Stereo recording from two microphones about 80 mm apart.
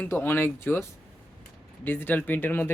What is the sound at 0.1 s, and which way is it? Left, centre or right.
Speech, left.